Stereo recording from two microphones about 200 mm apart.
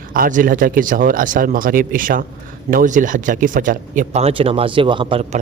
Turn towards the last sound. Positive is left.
turn(degrees=-25)  # may be behind; listen again after turning